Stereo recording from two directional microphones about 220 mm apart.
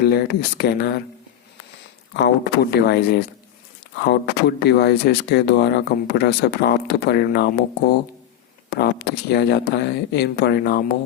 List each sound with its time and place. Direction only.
0.0 s speech: 45° left (ahead or behind)
2.1 s speech: 50° left (ahead or behind)